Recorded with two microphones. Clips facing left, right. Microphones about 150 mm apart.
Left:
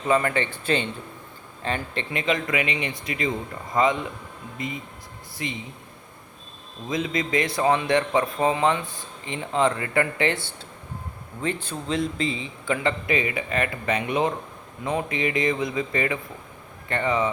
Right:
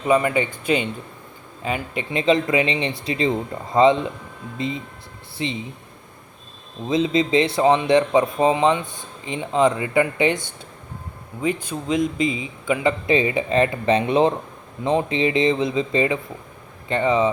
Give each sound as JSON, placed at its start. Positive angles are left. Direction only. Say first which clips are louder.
{"t": 0.0, "sound": "a man's voice", "louder": "right 4 dB", "side_deg": -15}
{"t": 2.1, "sound": "speech", "louder": "right 7 dB", "side_deg": -30}
{"t": 6.8, "sound": "a man's voice", "louder": "right 7 dB", "side_deg": -25}
{"t": 13.1, "sound": "speech", "louder": "right 6 dB", "side_deg": -30}